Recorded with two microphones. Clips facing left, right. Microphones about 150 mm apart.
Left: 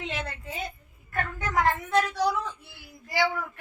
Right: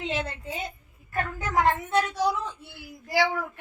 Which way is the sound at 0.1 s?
Centre (ahead or behind).